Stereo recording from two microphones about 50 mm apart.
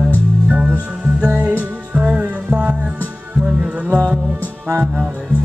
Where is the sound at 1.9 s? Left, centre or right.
Right.